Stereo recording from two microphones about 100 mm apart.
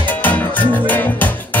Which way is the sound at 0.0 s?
15° left (ahead or behind).